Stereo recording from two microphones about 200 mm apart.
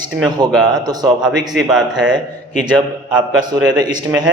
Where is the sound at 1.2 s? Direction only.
5° right (ahead or behind).